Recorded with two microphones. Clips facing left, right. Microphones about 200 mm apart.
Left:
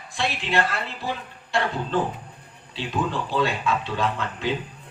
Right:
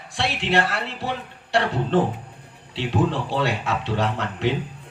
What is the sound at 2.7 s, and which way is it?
Speech, 75° right (ahead or behind).